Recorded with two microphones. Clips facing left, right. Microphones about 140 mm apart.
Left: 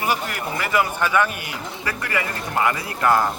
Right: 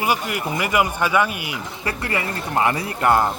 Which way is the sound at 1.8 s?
30° right (ahead or behind).